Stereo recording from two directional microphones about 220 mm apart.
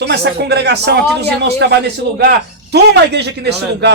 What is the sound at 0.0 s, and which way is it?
Speech, 50° right (ahead or behind).